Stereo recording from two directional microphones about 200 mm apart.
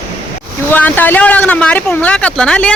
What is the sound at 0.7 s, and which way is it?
Speech, 10° left (ahead or behind).